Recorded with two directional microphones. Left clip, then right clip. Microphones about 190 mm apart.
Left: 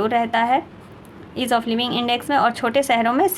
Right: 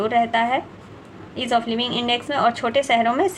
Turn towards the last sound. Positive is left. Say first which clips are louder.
# left 1 dB
turn(degrees=30)  # may be behind; listen again after turning